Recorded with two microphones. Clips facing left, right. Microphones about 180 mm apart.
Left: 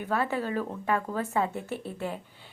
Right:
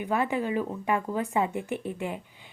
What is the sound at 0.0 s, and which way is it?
A woman's voice, 15° right (ahead or behind).